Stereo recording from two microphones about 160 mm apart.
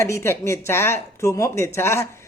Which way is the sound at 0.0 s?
15° left (ahead or behind).